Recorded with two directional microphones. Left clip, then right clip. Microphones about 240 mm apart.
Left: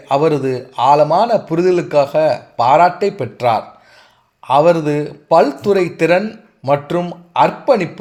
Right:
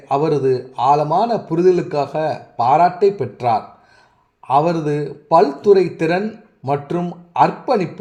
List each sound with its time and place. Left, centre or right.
0.1 s speech: left